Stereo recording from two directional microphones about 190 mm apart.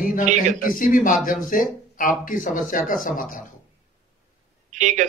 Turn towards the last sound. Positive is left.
turn(degrees=-40)  # may be behind; listen again after turning